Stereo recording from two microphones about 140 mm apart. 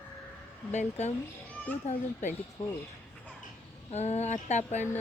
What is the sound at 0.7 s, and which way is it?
A child's voice, 55° left (ahead or behind).